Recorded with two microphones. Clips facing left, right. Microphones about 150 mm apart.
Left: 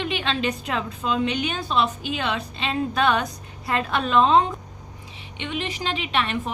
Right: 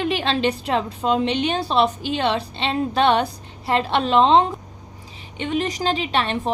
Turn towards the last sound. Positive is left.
turn(degrees=-35)  # may be behind; listen again after turning